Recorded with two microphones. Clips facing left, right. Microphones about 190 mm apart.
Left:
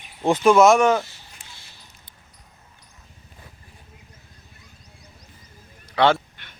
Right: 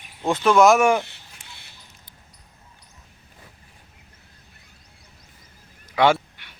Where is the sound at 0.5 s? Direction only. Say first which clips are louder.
Even; centre (ahead or behind).